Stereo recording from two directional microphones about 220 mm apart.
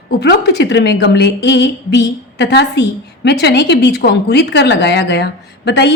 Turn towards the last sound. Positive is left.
turn(degrees=50)  # may be behind; listen again after turning